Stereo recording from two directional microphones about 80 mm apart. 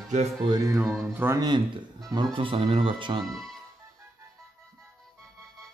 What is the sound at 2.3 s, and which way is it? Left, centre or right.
Speech, right.